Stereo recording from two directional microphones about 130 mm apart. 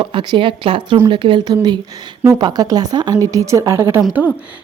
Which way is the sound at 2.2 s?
30° right (ahead or behind).